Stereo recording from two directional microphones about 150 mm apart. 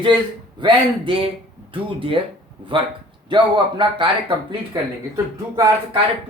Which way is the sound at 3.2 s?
30° right (ahead or behind).